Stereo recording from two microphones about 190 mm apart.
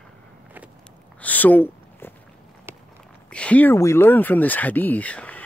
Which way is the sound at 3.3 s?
5° left (ahead or behind).